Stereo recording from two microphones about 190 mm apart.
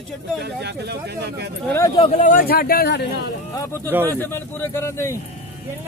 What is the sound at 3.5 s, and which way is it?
Speech, 15° left (ahead or behind).